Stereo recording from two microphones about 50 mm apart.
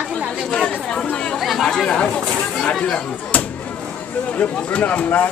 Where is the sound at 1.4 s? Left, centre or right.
Centre.